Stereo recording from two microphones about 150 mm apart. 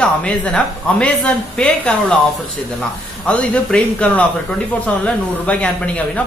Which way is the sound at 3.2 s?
10° left (ahead or behind).